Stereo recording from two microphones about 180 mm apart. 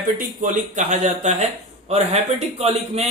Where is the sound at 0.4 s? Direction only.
40° right (ahead or behind).